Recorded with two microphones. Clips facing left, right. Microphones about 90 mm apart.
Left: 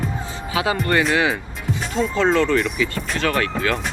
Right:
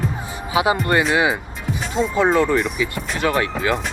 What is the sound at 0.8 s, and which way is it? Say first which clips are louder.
Speech: right 1 dB; 20° right (ahead or behind).